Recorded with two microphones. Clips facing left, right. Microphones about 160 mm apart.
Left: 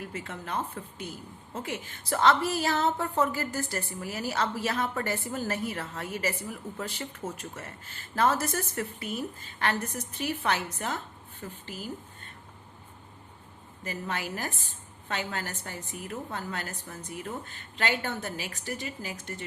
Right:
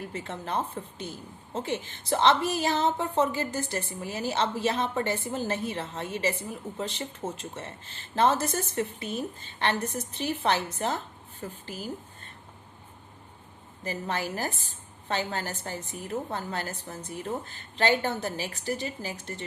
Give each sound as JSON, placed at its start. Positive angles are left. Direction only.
{"t": 0.1, "sound": "a woman's voice", "side_deg": -30}
{"t": 13.8, "sound": "a woman's voice", "side_deg": -30}